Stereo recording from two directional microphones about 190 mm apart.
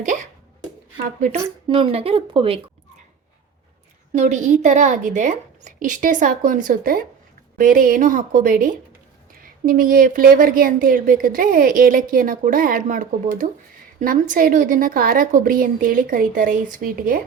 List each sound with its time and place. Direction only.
0.0 s a woman's voice: 40° right (ahead or behind)
1.4 s speech: 25° right (ahead or behind)
4.1 s a woman's voice: 35° right (ahead or behind)